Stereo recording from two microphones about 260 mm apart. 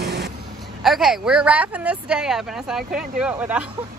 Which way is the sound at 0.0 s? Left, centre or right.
Right.